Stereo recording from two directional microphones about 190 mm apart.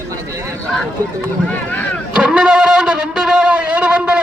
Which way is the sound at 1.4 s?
5° left (ahead or behind).